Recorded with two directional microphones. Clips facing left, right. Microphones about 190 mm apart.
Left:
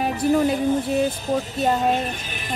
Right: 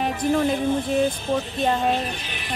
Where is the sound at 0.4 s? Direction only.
40° left (ahead or behind).